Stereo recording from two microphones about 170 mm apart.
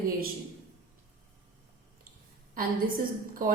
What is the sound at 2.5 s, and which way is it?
A woman's voice, 60° right (ahead or behind).